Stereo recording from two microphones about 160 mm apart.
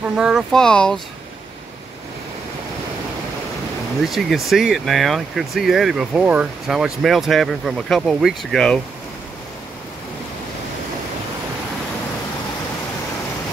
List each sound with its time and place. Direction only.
0.1 s speech: 5° right (ahead or behind)
4.0 s speech: centre (ahead or behind)